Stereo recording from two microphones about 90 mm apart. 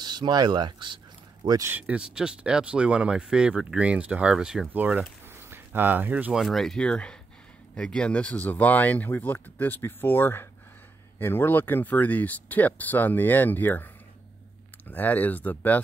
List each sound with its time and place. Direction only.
0.0 s speech: 55° right (ahead or behind)
1.8 s speech: 15° right (ahead or behind)
4.7 s speech: 20° right (ahead or behind)
6.3 s speech: centre (ahead or behind); by 13.8 s 20° left (ahead or behind)
14.9 s speech: 20° left (ahead or behind)